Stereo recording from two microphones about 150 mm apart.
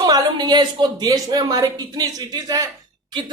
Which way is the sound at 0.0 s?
25° right (ahead or behind).